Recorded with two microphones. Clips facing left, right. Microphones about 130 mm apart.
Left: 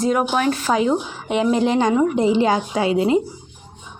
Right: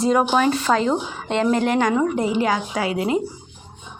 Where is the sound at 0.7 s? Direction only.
10° left (ahead or behind).